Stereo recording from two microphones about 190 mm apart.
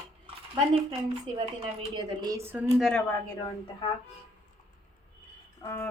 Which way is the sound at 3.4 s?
25° left (ahead or behind).